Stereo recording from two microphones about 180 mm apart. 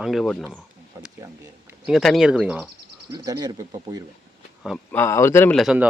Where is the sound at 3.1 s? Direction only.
20° right (ahead or behind).